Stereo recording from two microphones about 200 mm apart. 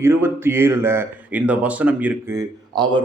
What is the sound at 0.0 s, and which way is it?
Speech, 10° right (ahead or behind).